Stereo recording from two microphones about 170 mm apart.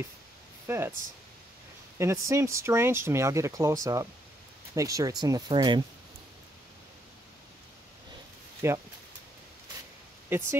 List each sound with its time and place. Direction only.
0.7 s speech: 15° right (ahead or behind)
2.0 s speech: 15° right (ahead or behind)
8.6 s speech: 15° right (ahead or behind)
10.3 s speech: 15° right (ahead or behind)